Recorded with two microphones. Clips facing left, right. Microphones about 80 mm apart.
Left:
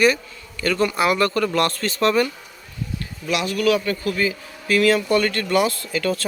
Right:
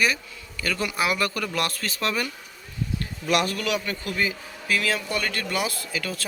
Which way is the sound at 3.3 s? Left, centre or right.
Right.